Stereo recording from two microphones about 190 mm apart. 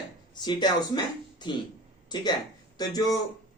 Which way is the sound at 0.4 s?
20° left (ahead or behind).